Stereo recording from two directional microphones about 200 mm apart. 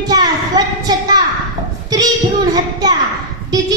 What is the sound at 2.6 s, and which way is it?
A woman's voice, 20° right (ahead or behind).